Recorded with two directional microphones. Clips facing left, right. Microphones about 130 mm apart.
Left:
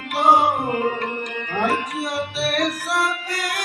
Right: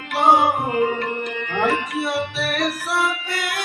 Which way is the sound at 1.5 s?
40° left (ahead or behind).